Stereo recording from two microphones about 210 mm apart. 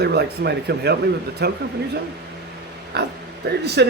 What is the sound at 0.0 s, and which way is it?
Speech, 50° right (ahead or behind).